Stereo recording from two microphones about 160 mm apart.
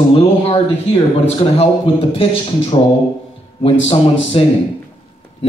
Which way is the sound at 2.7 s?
35° left (ahead or behind).